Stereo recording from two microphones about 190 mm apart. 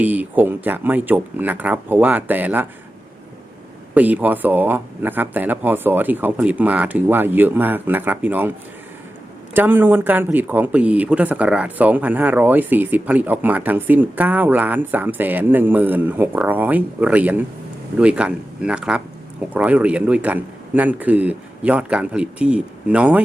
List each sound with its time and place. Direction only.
0.0 s speech: 10° right (ahead or behind)
3.9 s speech: 10° right (ahead or behind)
9.6 s speech: 10° right (ahead or behind)